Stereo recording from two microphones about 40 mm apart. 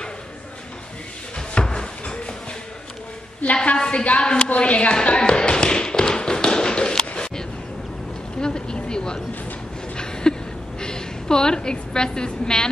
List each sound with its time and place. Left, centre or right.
1.5 s a sound: left
3.6 s a woman's voice: left
5.0 s tap: left
8.4 s vehicle: left
9.9 s a sound: centre
10.8 s a woman's voice: centre